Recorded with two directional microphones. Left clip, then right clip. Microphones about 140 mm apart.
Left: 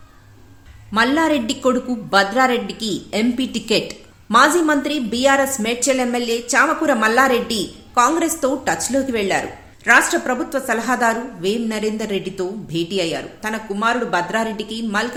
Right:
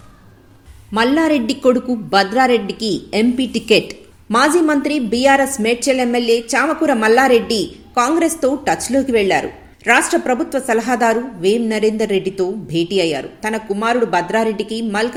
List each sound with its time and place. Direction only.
0.9 s a woman's voice: 10° right (ahead or behind)